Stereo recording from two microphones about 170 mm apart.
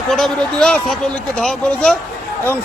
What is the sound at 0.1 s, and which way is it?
A man's voice, 5° left (ahead or behind).